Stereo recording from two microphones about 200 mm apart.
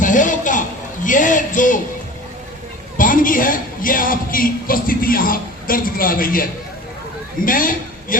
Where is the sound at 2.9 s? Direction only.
45° left (ahead or behind).